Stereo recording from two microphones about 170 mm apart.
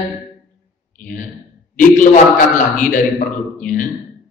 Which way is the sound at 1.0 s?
50° left (ahead or behind).